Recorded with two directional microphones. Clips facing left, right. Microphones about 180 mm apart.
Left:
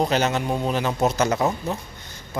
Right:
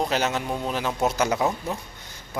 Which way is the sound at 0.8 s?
Centre (ahead or behind).